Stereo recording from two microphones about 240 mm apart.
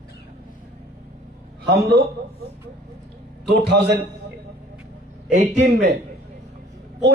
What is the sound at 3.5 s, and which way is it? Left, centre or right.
Speech, right.